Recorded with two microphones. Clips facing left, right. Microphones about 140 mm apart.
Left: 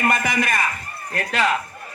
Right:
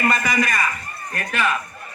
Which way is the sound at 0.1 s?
55° left (ahead or behind).